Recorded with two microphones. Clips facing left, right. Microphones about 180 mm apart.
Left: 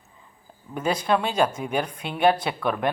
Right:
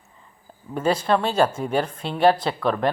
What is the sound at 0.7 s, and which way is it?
Speech, 10° left (ahead or behind).